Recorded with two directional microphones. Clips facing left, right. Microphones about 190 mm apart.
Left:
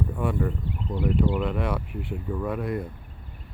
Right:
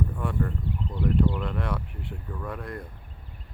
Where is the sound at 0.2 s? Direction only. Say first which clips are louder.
Left 3 dB; 10° left (ahead or behind).